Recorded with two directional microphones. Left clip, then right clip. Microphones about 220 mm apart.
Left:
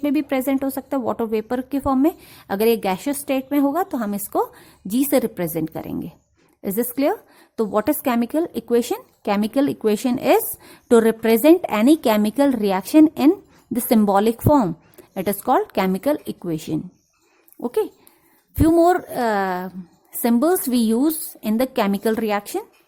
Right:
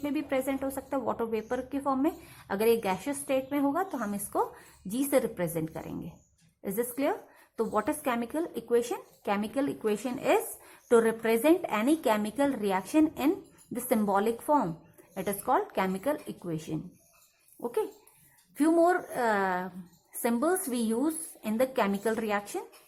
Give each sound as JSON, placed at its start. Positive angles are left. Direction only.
{"t": 0.0, "sound": "a woman's voice", "side_deg": 40}